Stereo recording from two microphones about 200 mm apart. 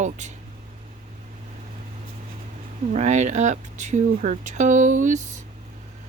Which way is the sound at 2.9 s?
35° right (ahead or behind).